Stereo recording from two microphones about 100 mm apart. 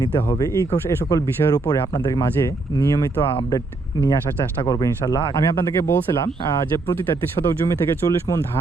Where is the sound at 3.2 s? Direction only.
65° left (ahead or behind).